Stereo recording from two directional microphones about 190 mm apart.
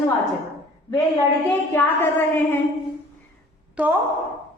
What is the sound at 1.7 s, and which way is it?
Speech, 10° left (ahead or behind).